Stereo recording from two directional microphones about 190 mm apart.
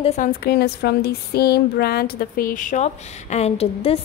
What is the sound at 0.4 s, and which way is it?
Speech, 55° left (ahead or behind).